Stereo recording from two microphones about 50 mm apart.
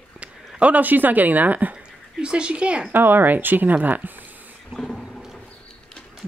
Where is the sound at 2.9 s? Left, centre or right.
Right.